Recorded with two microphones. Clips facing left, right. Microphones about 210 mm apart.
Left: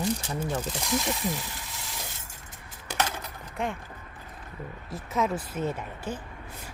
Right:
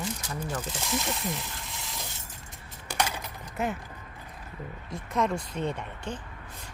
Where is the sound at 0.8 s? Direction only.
Centre (ahead or behind).